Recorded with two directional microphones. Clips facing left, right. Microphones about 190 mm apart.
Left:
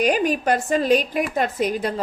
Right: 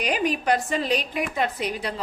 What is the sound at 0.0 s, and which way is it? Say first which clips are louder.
A woman's voice: left 5 dB; 45° left (ahead or behind).